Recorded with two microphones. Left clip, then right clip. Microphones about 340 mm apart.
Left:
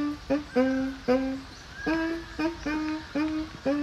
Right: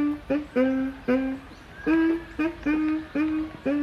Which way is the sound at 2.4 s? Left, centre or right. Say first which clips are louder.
Right 4 dB; left.